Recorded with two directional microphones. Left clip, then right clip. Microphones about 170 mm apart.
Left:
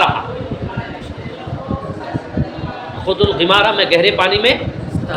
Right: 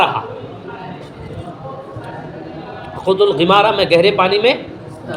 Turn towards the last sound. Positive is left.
turn(degrees=-50)  # may be behind; listen again after turning